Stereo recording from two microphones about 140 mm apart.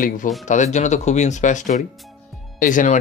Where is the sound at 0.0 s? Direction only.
70° left (ahead or behind).